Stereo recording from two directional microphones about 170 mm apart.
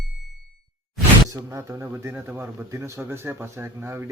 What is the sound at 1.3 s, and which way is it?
A man's voice, 15° right (ahead or behind).